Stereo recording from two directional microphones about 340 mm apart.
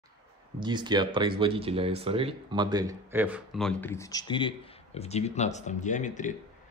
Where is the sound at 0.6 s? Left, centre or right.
Centre.